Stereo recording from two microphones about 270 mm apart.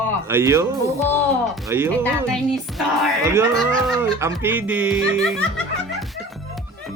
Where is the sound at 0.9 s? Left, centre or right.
Centre.